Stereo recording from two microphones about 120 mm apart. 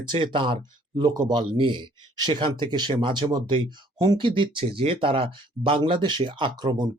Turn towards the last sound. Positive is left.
turn(degrees=-40)  # may be behind; listen again after turning